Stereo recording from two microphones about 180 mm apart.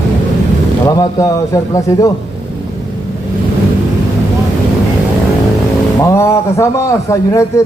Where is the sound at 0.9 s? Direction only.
20° left (ahead or behind).